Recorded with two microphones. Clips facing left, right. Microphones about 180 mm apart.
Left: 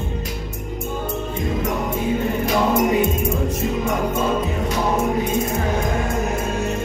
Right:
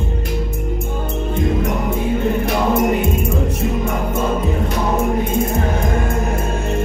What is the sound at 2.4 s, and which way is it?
Music, 60° right (ahead or behind).